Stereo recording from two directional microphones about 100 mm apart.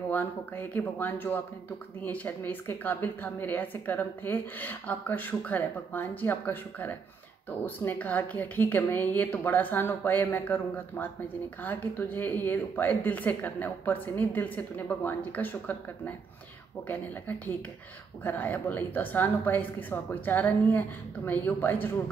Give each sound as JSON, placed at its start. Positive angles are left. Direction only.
{"t": 0.1, "sound": "a woman's voice", "side_deg": 20}
{"t": 16.8, "sound": "a woman's voice", "side_deg": 20}